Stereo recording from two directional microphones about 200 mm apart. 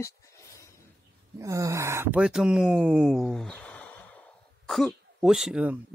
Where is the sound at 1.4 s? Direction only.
15° right (ahead or behind).